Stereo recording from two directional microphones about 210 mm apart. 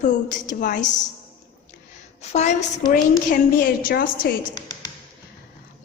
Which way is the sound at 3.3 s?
45° left (ahead or behind).